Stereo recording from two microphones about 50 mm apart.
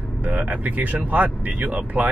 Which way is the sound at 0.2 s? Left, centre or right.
Right.